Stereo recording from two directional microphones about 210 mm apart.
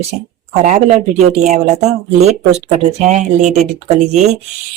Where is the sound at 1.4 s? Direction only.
35° right (ahead or behind).